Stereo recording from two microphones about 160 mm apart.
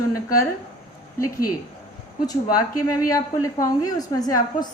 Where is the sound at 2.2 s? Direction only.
25° left (ahead or behind).